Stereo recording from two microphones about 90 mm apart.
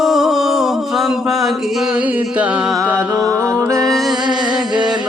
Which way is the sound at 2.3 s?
15° right (ahead or behind).